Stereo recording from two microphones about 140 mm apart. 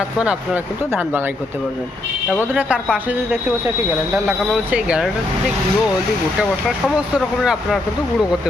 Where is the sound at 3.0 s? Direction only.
10° right (ahead or behind).